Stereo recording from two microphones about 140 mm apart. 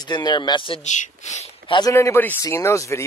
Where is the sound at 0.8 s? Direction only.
60° left (ahead or behind).